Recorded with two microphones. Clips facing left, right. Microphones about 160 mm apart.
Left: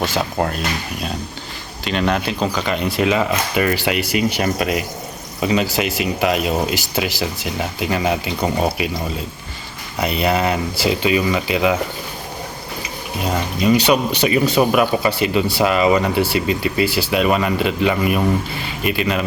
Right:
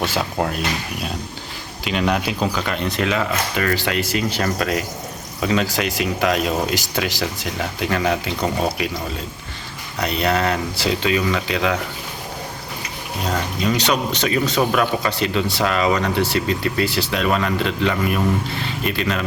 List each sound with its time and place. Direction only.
0.1 s speech: centre (ahead or behind)
1.8 s speech: 5° right (ahead or behind); by 8.2 s 20° left (ahead or behind)
8.8 s speech: 5° left (ahead or behind)
10.0 s speech: 5° left (ahead or behind)
13.2 s speech: 10° left (ahead or behind)